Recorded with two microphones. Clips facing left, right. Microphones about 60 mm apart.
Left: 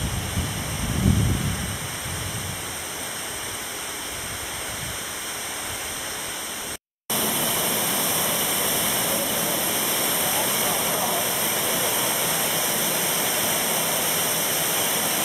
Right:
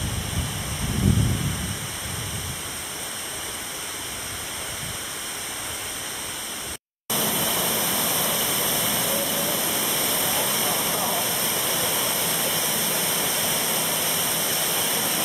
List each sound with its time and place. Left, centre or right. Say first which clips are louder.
7.1 s waterfall: even; centre